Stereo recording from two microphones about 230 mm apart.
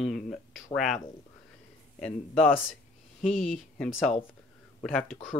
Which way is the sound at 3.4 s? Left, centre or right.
Centre.